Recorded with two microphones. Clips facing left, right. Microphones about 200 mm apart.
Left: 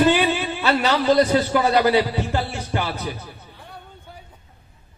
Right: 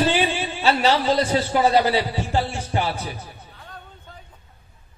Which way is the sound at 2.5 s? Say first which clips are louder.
Right 1 dB; 30° right (ahead or behind).